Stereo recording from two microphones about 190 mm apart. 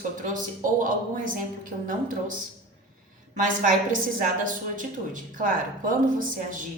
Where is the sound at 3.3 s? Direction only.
45° right (ahead or behind).